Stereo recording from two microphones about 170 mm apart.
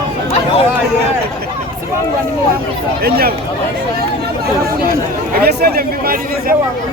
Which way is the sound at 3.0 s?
65° right (ahead or behind).